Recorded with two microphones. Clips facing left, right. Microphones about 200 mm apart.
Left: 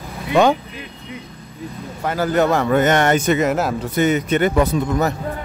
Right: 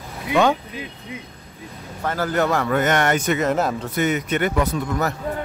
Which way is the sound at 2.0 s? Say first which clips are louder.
Left 4 dB; 15° left (ahead or behind).